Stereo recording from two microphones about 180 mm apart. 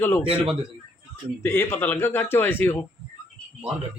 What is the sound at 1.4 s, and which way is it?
A man's voice, 10° left (ahead or behind).